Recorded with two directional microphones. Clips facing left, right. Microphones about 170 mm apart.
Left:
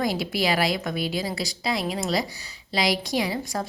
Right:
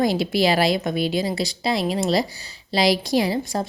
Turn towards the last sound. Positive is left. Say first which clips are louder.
# right 5 dB
turn(degrees=-30)  # may be behind; listen again after turning